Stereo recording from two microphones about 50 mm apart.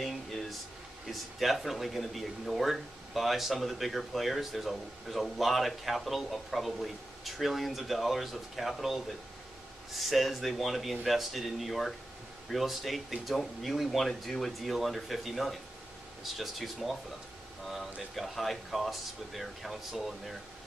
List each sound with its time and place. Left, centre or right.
0.0 s a sound: centre
1.0 s speech: centre
18.1 s speech: centre